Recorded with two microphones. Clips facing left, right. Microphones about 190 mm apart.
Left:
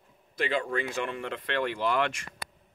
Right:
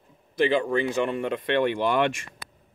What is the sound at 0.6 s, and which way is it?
Speech, 20° right (ahead or behind).